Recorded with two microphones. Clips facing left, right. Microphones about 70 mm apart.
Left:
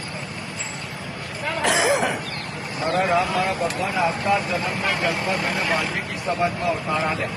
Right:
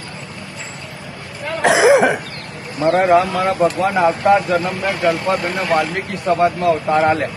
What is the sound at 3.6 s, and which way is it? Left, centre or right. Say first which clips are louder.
Speech: right 9 dB; right.